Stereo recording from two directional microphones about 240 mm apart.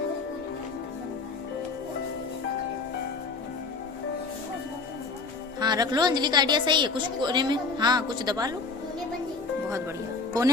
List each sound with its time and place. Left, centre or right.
5.5 s a woman's voice: centre